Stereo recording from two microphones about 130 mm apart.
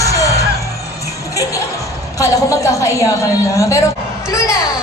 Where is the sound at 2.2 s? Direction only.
25° left (ahead or behind).